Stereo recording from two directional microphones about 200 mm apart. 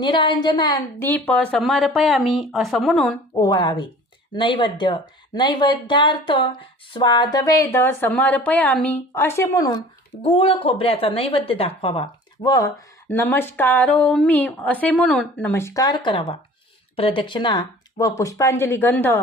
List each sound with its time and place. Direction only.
0.0 s a woman's voice: 25° left (ahead or behind); by 3.2 s 5° left (ahead or behind)
3.3 s speech: 20° left (ahead or behind)
10.2 s speech: 30° left (ahead or behind); by 19.2 s 10° left (ahead or behind)